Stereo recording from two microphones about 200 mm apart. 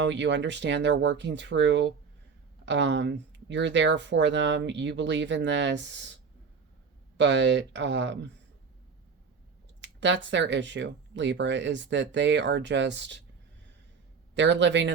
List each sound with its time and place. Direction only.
0.0 s speech: 65° right (ahead or behind)
7.2 s speech: 65° right (ahead or behind)
9.8 s a sound: 65° right (ahead or behind)
10.3 s speech: 65° right (ahead or behind)
14.3 s speech: 65° right (ahead or behind)